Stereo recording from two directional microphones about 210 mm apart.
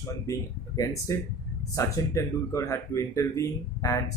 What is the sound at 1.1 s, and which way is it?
Speech, 15° left (ahead or behind).